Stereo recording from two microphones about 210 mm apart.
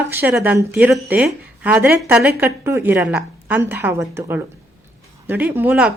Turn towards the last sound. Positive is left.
turn(degrees=-5)  # may be behind; listen again after turning